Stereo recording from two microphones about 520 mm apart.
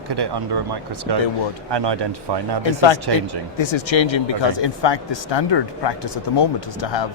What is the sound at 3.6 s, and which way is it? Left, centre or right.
Speech, left.